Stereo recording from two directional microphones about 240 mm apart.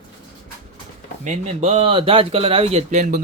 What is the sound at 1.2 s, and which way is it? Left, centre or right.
Speech, right.